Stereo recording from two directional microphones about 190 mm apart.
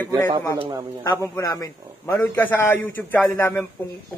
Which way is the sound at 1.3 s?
15° left (ahead or behind).